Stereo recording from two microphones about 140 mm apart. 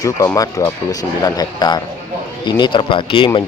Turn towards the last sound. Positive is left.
turn(degrees=35)  # may be behind; listen again after turning